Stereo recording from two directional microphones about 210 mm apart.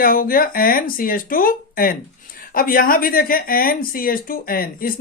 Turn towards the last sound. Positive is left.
turn(degrees=45)  # may be behind; listen again after turning